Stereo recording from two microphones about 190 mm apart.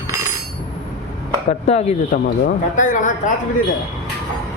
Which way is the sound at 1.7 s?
35° left (ahead or behind).